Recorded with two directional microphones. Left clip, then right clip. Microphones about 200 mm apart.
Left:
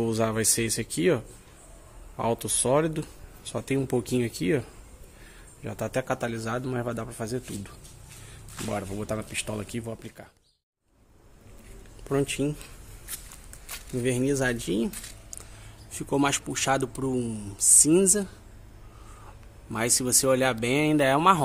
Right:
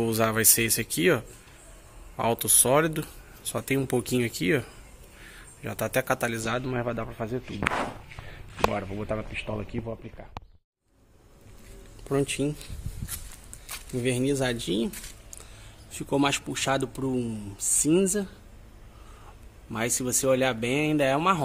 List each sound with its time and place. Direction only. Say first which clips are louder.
0.0 s a man's voice: right 2 dB; 5° left (ahead or behind)
12.0 s speech: even; centre (ahead or behind)
13.7 s speech: even; centre (ahead or behind)
20.0 s a man's voice: even; 5° left (ahead or behind)